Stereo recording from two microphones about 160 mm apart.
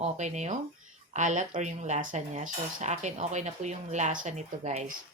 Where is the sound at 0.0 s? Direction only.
45° right (ahead or behind).